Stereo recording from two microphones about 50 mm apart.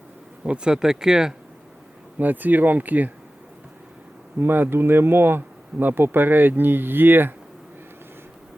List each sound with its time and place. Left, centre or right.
0.4 s speech: centre
2.1 s speech: right
4.4 s speech: right